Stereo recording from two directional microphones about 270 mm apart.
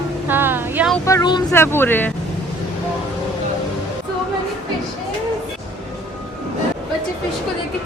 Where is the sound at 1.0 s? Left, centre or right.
Centre.